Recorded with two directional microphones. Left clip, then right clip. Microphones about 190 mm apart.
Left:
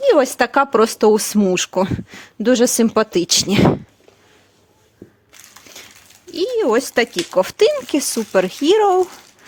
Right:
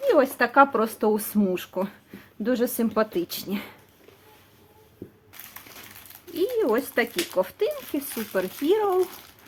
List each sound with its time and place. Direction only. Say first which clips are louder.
0.0 s speech: left 7 dB; 60° left (ahead or behind)
6.3 s speech: left 7 dB; 55° left (ahead or behind)